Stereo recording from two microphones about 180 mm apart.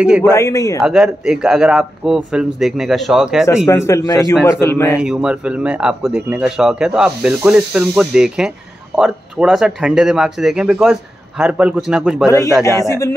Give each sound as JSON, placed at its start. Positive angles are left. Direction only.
{"t": 0.2, "sound": "a man's voice", "side_deg": 15}
{"t": 0.8, "sound": "speech", "side_deg": -5}
{"t": 3.6, "sound": "a man's voice", "side_deg": 15}
{"t": 5.0, "sound": "speech", "side_deg": -5}
{"t": 12.6, "sound": "a man's voice", "side_deg": 15}